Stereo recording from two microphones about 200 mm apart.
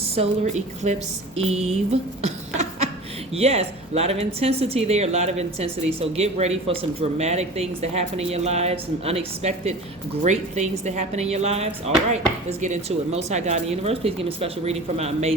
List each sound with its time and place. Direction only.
0.2 s a woman's voice: 35° right (ahead or behind)